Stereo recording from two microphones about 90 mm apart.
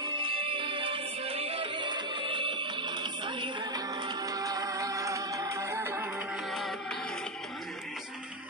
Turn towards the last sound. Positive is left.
turn(degrees=0)  # may be behind; listen again after turning